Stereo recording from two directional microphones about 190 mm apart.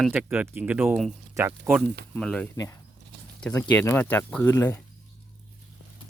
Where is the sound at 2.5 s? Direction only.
15° left (ahead or behind).